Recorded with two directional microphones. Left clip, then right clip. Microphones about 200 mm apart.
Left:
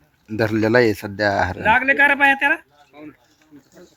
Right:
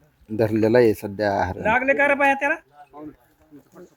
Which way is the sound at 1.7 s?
50° right (ahead or behind).